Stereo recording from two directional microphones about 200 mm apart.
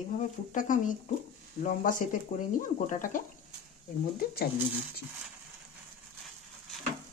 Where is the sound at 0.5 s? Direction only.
40° left (ahead or behind).